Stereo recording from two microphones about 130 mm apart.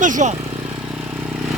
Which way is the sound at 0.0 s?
70° right (ahead or behind).